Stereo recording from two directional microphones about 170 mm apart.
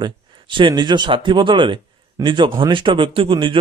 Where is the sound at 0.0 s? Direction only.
30° right (ahead or behind).